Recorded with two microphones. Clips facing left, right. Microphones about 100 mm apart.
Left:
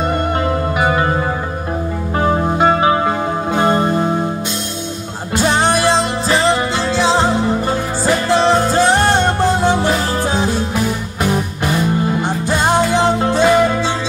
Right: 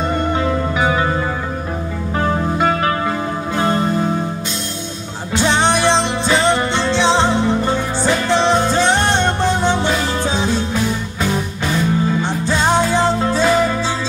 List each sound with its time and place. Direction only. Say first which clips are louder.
0.5 s music: left 1 dB; 15° left (ahead or behind)
2.2 s music: left 4 dB; 25° left (ahead or behind)
5.3 s music: left 1 dB; 10° left (ahead or behind)